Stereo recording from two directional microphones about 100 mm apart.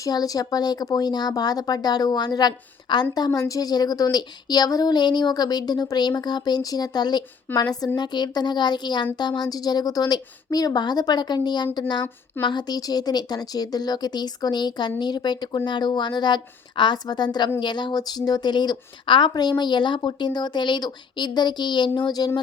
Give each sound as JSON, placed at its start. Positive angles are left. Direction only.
{"t": 0.0, "sound": "speech", "side_deg": 40}